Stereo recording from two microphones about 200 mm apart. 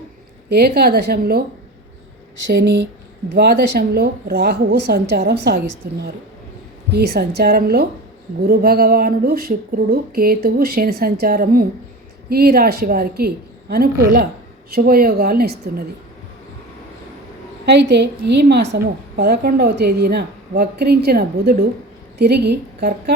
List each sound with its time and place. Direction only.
0.5 s a woman's voice: 50° right (ahead or behind)
2.5 s a woman's voice: 55° right (ahead or behind)
17.7 s a woman's voice: 60° right (ahead or behind)